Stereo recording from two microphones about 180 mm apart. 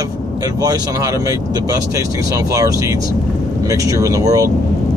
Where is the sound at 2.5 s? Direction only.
15° right (ahead or behind).